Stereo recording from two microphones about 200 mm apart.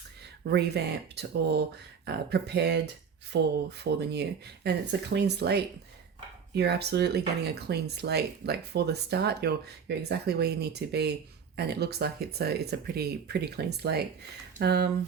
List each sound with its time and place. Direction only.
0.5 s speech: 55° right (ahead or behind)